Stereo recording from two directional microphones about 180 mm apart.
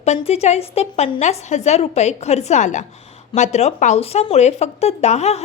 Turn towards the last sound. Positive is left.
turn(degrees=40)  # may be behind; listen again after turning